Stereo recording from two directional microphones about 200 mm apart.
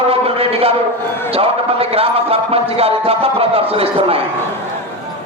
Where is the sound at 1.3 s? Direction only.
30° right (ahead or behind).